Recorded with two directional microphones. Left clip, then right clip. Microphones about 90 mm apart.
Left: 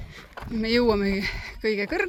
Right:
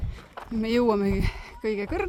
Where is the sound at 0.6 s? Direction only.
35° right (ahead or behind); by 2.0 s 20° right (ahead or behind).